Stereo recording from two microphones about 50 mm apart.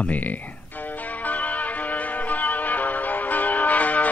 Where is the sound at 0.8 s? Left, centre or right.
Left.